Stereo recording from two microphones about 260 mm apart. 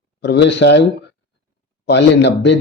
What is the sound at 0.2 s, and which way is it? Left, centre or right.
Speech, left.